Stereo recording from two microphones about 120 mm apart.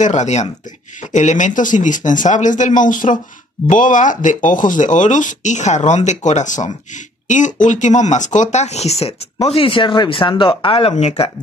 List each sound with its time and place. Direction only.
0.0 s speech: 80° left
1.1 s speech: 90° left; by 11.2 s 60° left (ahead or behind)